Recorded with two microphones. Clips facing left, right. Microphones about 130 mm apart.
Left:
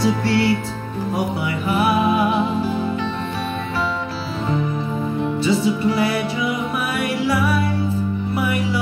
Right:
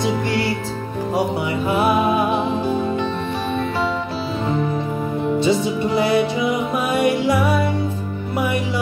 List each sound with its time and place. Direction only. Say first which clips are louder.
1.8 s music: even; 20° right (ahead or behind)
5.4 s music: left 1 dB; 20° right (ahead or behind)